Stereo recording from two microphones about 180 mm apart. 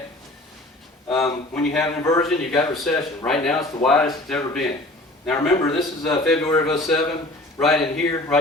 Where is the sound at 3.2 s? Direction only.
5° left (ahead or behind).